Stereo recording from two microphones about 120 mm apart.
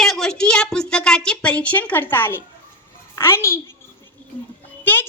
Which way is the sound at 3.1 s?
20° left (ahead or behind).